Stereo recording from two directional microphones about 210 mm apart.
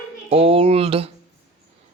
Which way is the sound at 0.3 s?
25° right (ahead or behind).